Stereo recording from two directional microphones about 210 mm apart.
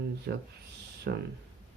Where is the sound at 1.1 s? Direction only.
50° right (ahead or behind).